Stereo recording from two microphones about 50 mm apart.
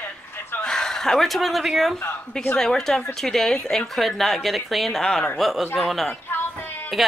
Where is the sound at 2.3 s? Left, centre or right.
Centre.